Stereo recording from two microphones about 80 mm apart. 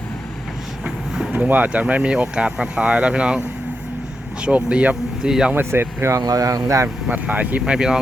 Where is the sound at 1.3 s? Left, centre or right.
Centre.